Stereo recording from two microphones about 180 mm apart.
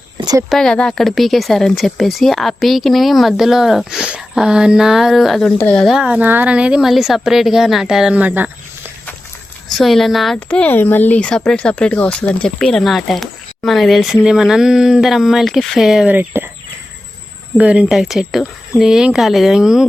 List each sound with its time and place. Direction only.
0.2 s a sound: 20° right (ahead or behind)
0.5 s speech: 5° left (ahead or behind)
9.6 s speech: centre (ahead or behind)
17.6 s speech: 5° right (ahead or behind)